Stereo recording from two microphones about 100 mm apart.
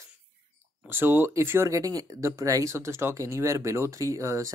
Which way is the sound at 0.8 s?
20° right (ahead or behind).